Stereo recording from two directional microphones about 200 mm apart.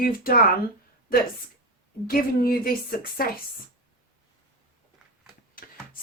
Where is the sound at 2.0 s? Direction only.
45° left (ahead or behind).